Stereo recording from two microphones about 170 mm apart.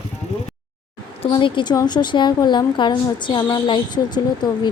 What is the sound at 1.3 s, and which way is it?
A woman's voice, 25° left (ahead or behind).